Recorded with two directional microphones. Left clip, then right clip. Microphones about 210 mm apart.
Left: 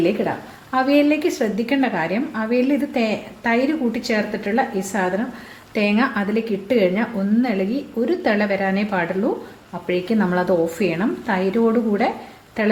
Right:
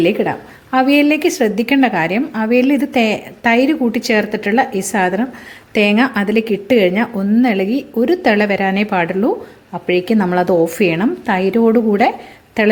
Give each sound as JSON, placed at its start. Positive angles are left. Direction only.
{"t": 0.0, "sound": "a woman's voice", "side_deg": -40}